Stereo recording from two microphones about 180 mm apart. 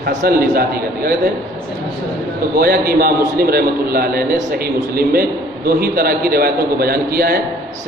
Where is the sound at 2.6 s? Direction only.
55° right (ahead or behind).